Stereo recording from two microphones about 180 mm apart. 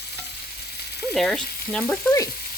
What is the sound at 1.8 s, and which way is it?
Frying, 15° left (ahead or behind).